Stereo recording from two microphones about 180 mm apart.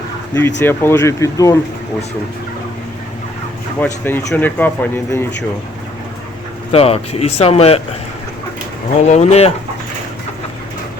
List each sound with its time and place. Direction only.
0.6 s speech: 10° left (ahead or behind)
3.8 s speech: 10° left (ahead or behind)
6.7 s speech: 35° left (ahead or behind)
9.0 s speech: 40° left (ahead or behind)